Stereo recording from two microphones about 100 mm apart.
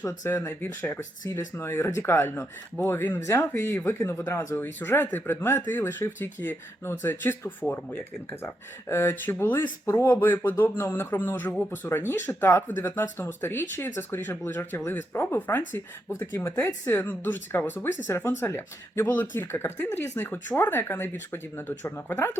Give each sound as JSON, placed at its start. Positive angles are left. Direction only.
{"t": 0.3, "sound": "speech", "side_deg": 25}
{"t": 16.1, "sound": "speech", "side_deg": 30}